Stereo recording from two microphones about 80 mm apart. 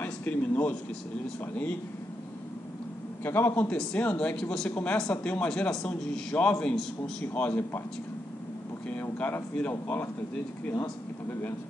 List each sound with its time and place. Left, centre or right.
0.0 s speech: left
3.3 s speech: left
3.6 s a man's voice: centre
7.3 s speech: left
9.2 s speech: centre